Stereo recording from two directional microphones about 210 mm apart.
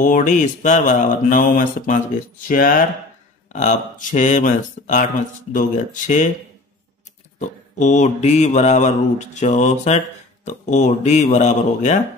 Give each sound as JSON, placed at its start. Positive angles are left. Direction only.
{"t": 0.0, "sound": "mantra", "side_deg": 40}
{"t": 7.3, "sound": "mantra", "side_deg": 35}